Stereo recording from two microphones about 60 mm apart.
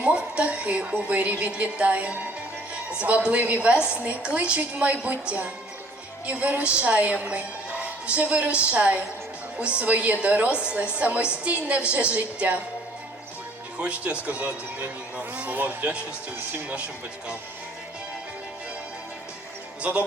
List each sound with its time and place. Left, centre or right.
0.0 s a woman's voice: centre
13.7 s a woman's voice: right
19.9 s a woman's voice: right